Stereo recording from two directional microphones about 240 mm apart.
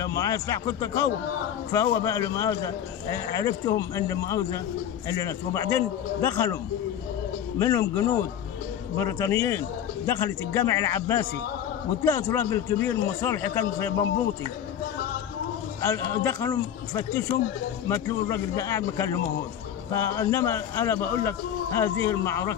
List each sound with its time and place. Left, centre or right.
0.0 s a man's voice: centre
7.5 s a man's voice: centre
8.9 s a man's voice: centre
15.8 s a man's voice: centre